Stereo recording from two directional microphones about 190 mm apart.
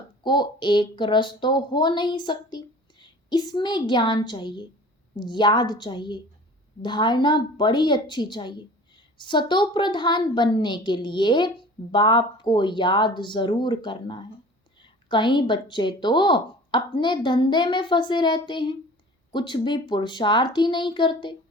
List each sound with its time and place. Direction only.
0.2 s a woman's voice: 25° left (ahead or behind)